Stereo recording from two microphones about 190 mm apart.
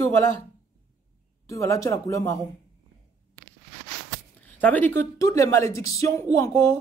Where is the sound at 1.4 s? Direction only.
15° left (ahead or behind).